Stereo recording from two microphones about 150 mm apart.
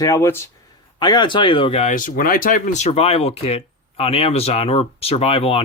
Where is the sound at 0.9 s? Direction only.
30° left (ahead or behind).